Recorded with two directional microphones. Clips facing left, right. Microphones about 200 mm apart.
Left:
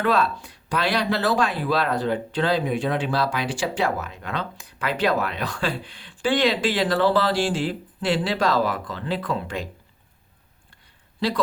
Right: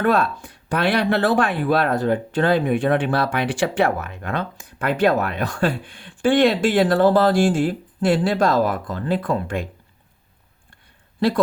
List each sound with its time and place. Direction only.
0.0 s speech: 50° right (ahead or behind)
11.2 s speech: 55° right (ahead or behind)